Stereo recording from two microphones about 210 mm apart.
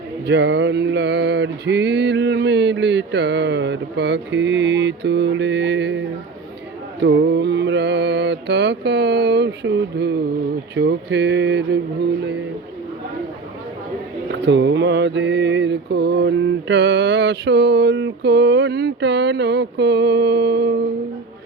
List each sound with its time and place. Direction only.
0.3 s male singing: 55° right (ahead or behind)
7.0 s mantra: 55° right (ahead or behind)
10.8 s male singing: 55° right (ahead or behind)
14.3 s mantra: 55° right (ahead or behind)